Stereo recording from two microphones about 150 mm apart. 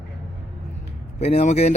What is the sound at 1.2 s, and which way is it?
Speech, 45° left (ahead or behind).